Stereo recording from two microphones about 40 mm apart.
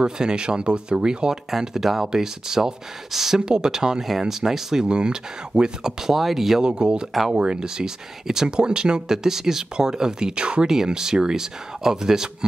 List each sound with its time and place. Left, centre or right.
0.0 s speech: centre
1.6 s speech: centre
4.8 s speech: right; by 6.6 s centre
6.6 s speech: right